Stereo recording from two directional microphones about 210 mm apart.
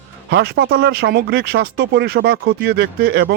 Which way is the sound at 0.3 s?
55° right (ahead or behind).